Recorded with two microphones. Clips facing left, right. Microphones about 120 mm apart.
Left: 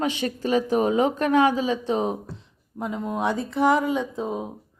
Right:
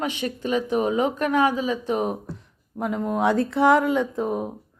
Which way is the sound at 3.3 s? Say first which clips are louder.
Right 2 dB; 75° right (ahead or behind).